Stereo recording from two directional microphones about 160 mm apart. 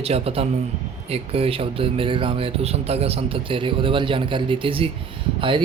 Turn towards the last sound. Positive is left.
turn(degrees=-30)  # may be behind; listen again after turning